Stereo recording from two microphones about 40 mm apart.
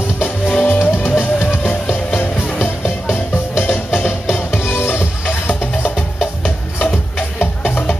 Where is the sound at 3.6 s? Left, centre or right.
Left.